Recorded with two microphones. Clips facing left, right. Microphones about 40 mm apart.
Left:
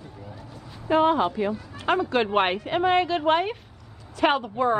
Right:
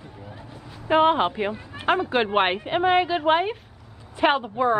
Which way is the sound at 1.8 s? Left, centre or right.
Centre.